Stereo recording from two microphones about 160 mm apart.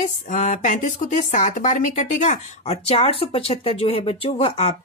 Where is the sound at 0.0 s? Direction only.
50° left (ahead or behind).